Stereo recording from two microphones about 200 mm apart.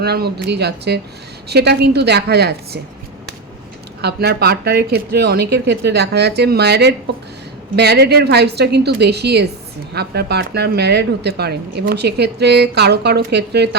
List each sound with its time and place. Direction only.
0.0 s speech: 55° right (ahead or behind)
4.0 s speech: 50° right (ahead or behind)